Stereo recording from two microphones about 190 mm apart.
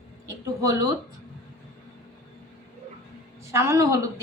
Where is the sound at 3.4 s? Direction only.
15° right (ahead or behind).